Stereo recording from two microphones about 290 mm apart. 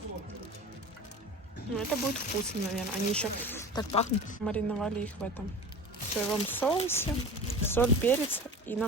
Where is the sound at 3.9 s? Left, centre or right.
Left.